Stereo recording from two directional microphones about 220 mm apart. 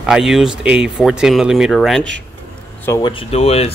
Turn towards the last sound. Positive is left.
turn(degrees=25)  # may be behind; listen again after turning